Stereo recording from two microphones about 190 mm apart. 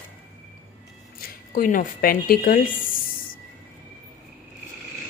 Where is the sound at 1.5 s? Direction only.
45° left (ahead or behind).